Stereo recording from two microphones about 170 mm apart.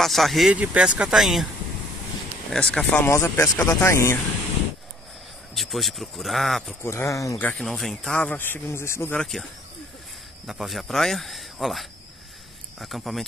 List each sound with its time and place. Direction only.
0.0 s speech: centre (ahead or behind)
2.5 s speech: 5° left (ahead or behind)
5.5 s speech: centre (ahead or behind)
6.8 s speech: 15° left (ahead or behind)
9.2 s speech: centre (ahead or behind)